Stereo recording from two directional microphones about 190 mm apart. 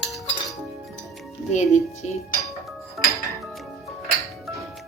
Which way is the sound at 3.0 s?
Centre (ahead or behind).